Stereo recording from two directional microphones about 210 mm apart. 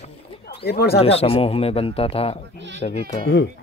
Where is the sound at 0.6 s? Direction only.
50° left (ahead or behind).